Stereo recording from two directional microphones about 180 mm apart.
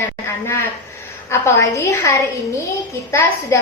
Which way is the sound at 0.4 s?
15° left (ahead or behind).